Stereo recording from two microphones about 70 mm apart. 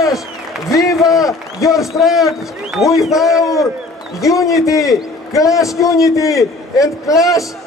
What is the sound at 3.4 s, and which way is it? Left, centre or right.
A man's voice, left.